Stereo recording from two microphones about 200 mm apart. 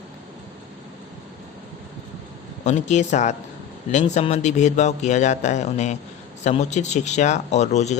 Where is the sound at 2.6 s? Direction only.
35° left (ahead or behind).